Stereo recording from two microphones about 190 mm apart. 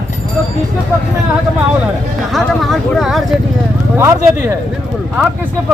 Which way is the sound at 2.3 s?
Centre (ahead or behind).